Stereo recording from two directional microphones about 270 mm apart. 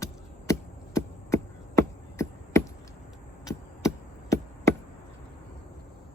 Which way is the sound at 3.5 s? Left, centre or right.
Centre.